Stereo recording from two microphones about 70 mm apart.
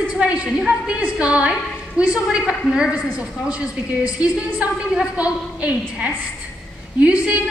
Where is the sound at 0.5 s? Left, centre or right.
Centre.